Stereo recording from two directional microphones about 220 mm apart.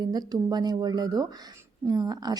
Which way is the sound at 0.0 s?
15° right (ahead or behind).